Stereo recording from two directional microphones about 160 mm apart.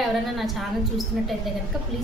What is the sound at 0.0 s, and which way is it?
A woman's voice, centre (ahead or behind).